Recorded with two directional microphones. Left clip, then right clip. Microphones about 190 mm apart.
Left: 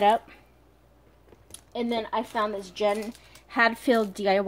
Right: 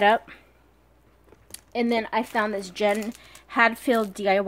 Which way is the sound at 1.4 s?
40° right (ahead or behind).